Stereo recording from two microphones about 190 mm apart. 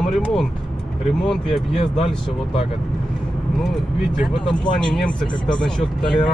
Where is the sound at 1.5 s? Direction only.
30° left (ahead or behind).